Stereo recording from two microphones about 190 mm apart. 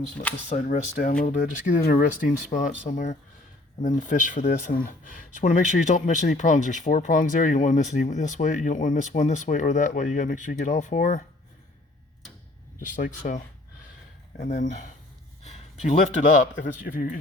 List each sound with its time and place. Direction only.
0.4 s speech: 40° left (ahead or behind)
12.8 s speech: 40° left (ahead or behind)